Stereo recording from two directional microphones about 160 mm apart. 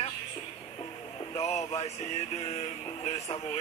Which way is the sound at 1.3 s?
40° left (ahead or behind).